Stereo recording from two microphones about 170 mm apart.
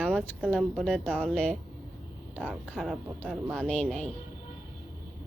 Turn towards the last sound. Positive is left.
turn(degrees=5)  # may be behind; listen again after turning